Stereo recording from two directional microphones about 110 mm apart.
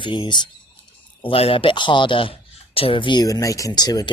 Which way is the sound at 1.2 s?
55° left (ahead or behind).